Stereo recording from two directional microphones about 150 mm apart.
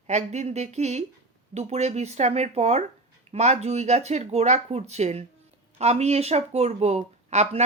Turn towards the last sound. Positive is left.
turn(degrees=-45)  # may be behind; listen again after turning